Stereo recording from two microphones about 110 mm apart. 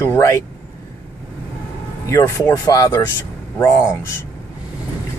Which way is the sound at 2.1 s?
25° left (ahead or behind).